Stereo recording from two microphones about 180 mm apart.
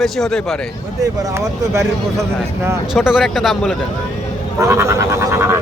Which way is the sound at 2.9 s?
5° right (ahead or behind).